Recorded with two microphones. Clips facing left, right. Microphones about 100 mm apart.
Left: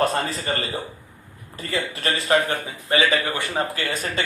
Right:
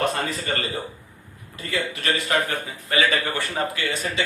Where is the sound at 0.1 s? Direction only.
30° left (ahead or behind).